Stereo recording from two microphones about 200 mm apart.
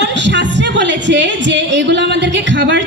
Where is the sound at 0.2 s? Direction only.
60° right (ahead or behind).